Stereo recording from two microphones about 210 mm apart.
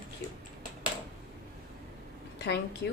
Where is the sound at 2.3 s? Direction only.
55° left (ahead or behind).